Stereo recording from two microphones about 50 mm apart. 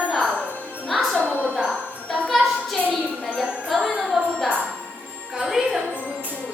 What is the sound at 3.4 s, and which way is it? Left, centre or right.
Music, centre.